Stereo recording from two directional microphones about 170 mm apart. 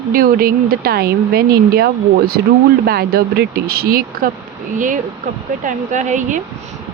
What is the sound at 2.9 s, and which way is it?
Speech, 65° right (ahead or behind).